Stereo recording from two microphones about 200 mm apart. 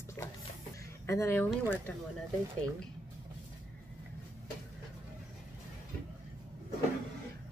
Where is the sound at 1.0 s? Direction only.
15° left (ahead or behind).